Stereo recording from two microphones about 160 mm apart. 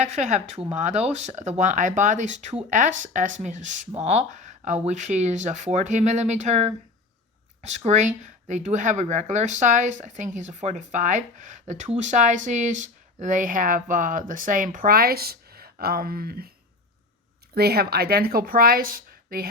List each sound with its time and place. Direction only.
0.0 s speech: 45° right (ahead or behind)
7.9 s speech: 50° right (ahead or behind); by 16.5 s 70° right (ahead or behind)
17.5 s speech: 75° right (ahead or behind)